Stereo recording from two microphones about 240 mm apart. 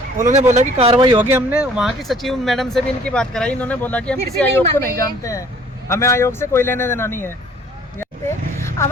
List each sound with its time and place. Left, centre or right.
0.3 s speech: right
1.2 s a man's voice: centre
8.5 s a sound: centre